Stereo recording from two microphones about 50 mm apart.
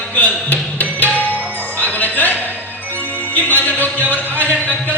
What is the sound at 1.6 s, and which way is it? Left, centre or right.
Music, left.